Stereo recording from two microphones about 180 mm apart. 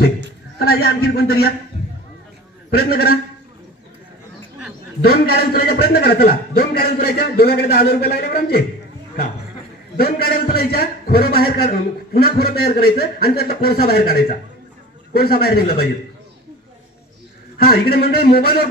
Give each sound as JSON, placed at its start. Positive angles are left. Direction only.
{"t": 0.6, "sound": "a man's voice", "side_deg": 60}
{"t": 2.7, "sound": "a man's voice", "side_deg": 55}
{"t": 5.1, "sound": "a man's voice", "side_deg": 60}
{"t": 9.9, "sound": "a man's voice", "side_deg": 55}
{"t": 15.1, "sound": "a man's voice", "side_deg": 60}
{"t": 17.6, "sound": "a man's voice", "side_deg": 60}